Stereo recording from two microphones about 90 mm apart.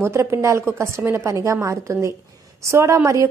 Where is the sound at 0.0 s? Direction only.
30° right (ahead or behind).